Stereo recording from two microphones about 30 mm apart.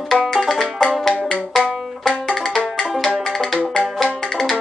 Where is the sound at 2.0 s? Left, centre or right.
Centre.